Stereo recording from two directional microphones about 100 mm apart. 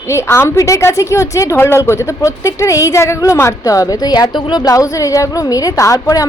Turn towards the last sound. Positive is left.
turn(degrees=35)  # may be behind; listen again after turning